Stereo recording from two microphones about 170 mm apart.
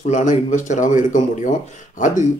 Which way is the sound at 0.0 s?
45° left (ahead or behind).